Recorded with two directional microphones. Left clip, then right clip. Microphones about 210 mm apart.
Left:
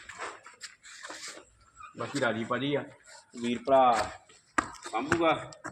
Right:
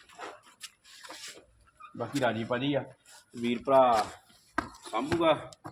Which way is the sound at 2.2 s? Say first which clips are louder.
Even; 55° right (ahead or behind).